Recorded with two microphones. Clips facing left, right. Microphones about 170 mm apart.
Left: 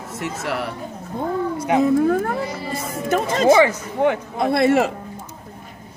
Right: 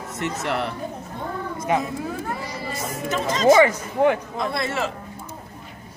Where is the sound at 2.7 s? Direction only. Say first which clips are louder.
Left 5 dB; 60° left (ahead or behind).